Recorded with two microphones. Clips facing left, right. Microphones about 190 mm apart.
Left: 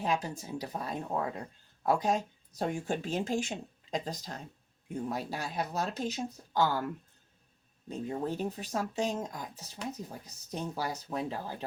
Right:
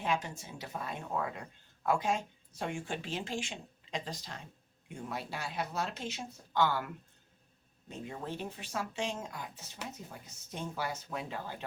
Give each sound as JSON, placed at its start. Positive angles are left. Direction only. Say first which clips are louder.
{"t": 0.0, "sound": "speech", "louder": "left 2 dB", "side_deg": 35}